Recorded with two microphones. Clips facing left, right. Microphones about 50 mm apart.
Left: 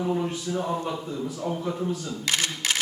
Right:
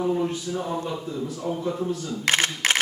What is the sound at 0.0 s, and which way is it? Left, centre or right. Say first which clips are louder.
A man's voice: right 2 dB; centre.